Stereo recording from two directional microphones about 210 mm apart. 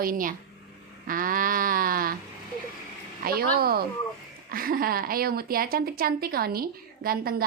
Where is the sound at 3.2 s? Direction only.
45° right (ahead or behind).